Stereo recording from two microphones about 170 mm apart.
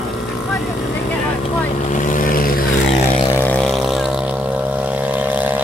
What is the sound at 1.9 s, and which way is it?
Vehicle, 50° left (ahead or behind).